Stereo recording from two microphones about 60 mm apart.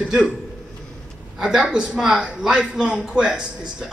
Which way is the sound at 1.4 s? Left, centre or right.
Centre.